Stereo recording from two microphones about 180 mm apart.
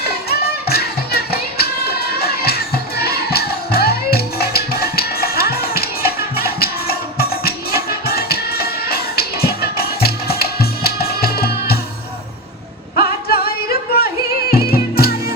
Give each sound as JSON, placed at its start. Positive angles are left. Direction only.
{"t": 0.3, "sound": "music", "side_deg": 60}
{"t": 13.0, "sound": "singing", "side_deg": 55}
{"t": 14.5, "sound": "music", "side_deg": 60}